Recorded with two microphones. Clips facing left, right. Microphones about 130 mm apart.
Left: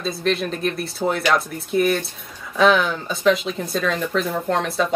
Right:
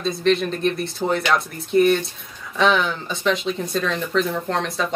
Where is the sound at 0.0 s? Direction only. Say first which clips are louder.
Right 3 dB; 5° left (ahead or behind).